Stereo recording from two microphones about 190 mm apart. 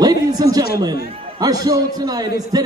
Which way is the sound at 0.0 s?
20° right (ahead or behind).